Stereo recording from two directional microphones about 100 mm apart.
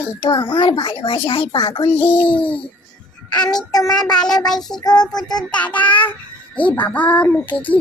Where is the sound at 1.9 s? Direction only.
15° left (ahead or behind).